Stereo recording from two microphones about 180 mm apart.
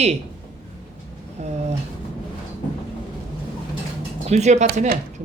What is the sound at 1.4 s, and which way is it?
Speech, 40° right (ahead or behind).